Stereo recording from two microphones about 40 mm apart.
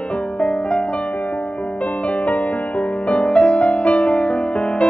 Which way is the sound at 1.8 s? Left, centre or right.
Left.